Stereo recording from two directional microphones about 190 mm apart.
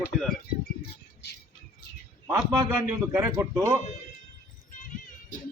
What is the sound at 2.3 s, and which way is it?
A man's voice, 20° right (ahead or behind).